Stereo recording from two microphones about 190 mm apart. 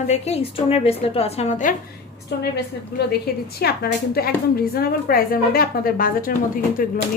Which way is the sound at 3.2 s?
55° left (ahead or behind).